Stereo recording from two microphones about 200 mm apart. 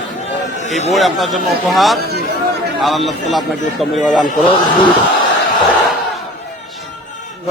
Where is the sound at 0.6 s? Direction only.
35° left (ahead or behind).